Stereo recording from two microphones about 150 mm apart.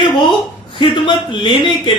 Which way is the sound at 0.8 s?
35° left (ahead or behind).